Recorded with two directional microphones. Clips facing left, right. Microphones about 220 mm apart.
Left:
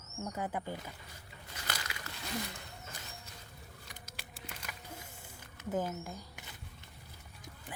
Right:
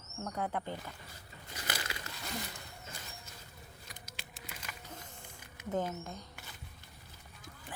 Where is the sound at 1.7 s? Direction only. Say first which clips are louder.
Right 2 dB; 30° right (ahead or behind).